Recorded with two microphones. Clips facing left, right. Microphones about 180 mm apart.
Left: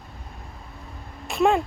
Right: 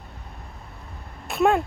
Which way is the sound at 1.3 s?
Centre (ahead or behind).